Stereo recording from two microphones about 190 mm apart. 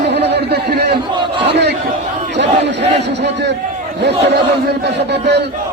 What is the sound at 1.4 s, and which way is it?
Crowd, 60° right (ahead or behind).